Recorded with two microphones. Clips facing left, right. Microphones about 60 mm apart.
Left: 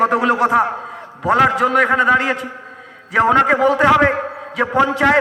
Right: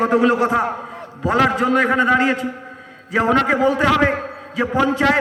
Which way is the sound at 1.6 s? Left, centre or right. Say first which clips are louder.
Left 2 dB; left.